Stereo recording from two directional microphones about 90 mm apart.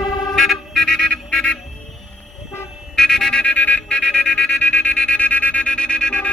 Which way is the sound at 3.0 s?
5° left (ahead or behind).